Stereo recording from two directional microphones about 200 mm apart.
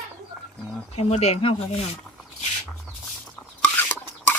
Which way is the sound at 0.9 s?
30° left (ahead or behind).